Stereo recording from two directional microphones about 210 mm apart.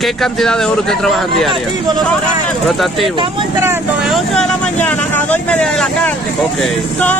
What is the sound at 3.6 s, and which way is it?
Speech, 10° right (ahead or behind).